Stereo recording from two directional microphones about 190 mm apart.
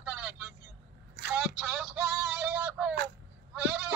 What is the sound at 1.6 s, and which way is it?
Speech, 5° right (ahead or behind).